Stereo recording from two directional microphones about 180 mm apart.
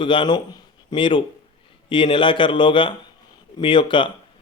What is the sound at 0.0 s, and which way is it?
Speech, 25° left (ahead or behind).